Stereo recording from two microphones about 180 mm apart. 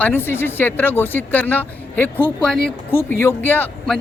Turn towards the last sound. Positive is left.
turn(degrees=5)  # may be behind; listen again after turning